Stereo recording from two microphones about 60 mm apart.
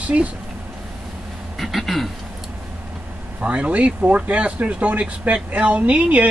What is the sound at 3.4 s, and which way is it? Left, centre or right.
Speech, right.